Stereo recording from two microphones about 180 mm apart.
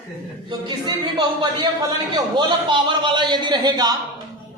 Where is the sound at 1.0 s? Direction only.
25° right (ahead or behind).